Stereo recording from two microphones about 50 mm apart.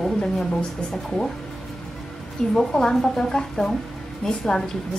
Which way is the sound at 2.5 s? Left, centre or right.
Centre.